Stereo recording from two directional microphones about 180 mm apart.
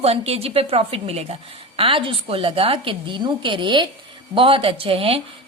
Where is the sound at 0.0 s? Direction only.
35° right (ahead or behind).